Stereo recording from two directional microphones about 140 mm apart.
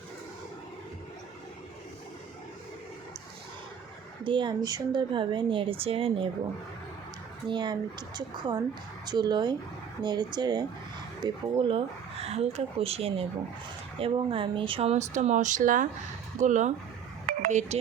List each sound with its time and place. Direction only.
4.2 s speech: 35° right (ahead or behind)
7.4 s speech: 35° right (ahead or behind)
11.2 s speech: 40° right (ahead or behind); by 17.7 s 55° right (ahead or behind)